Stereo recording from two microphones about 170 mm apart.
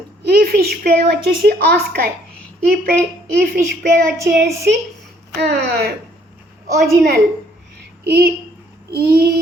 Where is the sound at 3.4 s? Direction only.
60° right (ahead or behind).